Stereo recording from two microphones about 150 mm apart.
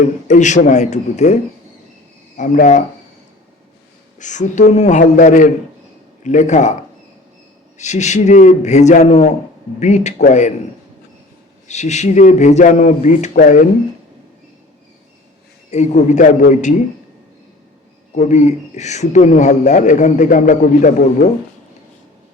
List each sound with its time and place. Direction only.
0.3 s a man's voice: 50° left (ahead or behind)
2.4 s speech: 60° left (ahead or behind)
4.2 s speech: 55° left (ahead or behind)
5.1 s speech: 65° left (ahead or behind)
6.2 s a man's voice: 55° left (ahead or behind)
7.8 s a man's voice: 50° left (ahead or behind)
11.7 s a man's voice: 50° left (ahead or behind)
15.7 s a man's voice: 50° left (ahead or behind)
18.2 s a man's voice: 50° left (ahead or behind)